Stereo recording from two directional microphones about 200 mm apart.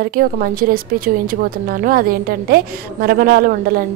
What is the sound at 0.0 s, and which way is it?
A woman's voice, 45° right (ahead or behind).